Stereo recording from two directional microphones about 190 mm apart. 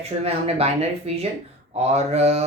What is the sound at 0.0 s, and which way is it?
Mantra, 35° right (ahead or behind).